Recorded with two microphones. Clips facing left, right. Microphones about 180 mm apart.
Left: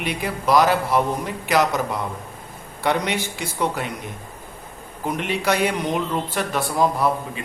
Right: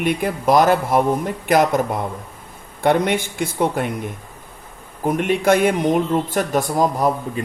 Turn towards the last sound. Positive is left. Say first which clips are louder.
# right 3 dB
turn(degrees=-45)  # may be behind; listen again after turning